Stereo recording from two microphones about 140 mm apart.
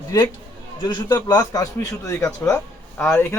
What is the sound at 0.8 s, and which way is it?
A man's voice, 30° left (ahead or behind).